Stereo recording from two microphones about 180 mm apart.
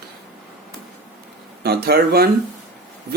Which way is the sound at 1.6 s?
60° right (ahead or behind).